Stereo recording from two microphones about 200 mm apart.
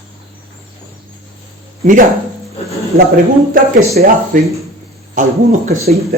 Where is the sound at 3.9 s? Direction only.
45° right (ahead or behind).